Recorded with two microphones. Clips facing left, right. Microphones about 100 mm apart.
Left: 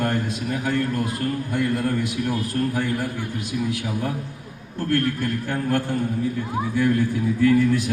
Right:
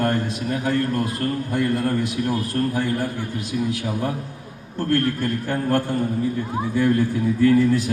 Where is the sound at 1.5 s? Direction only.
35° right (ahead or behind).